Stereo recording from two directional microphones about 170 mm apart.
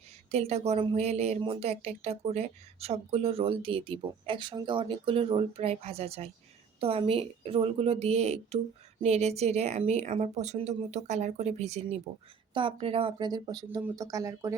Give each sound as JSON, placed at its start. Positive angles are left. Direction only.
{"t": 0.3, "sound": "speech", "side_deg": -40}